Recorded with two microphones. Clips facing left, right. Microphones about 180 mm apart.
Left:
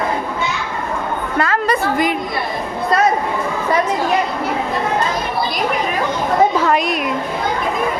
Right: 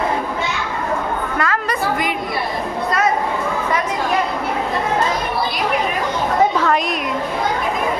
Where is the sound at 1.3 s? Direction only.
30° left (ahead or behind).